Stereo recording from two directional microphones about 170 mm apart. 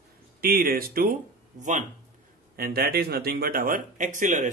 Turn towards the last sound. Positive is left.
turn(degrees=-45)  # may be behind; listen again after turning